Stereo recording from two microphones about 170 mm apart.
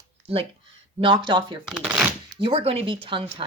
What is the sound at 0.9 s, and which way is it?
Speech, 30° right (ahead or behind).